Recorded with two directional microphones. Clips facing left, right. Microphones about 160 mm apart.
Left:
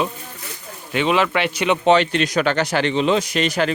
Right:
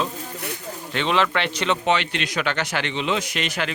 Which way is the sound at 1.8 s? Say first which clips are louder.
Left 7 dB; 40° left (ahead or behind).